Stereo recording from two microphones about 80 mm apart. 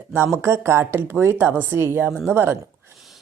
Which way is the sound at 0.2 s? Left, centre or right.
Right.